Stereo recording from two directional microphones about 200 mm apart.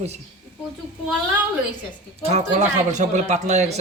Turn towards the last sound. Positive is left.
turn(degrees=-35)  # may be behind; listen again after turning